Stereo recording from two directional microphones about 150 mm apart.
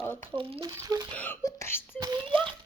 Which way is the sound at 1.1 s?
10° left (ahead or behind).